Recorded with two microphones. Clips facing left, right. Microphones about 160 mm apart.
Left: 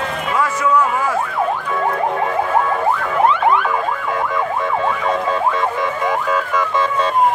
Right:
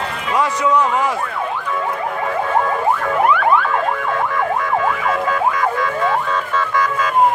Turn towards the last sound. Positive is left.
turn(degrees=15)  # may be behind; listen again after turning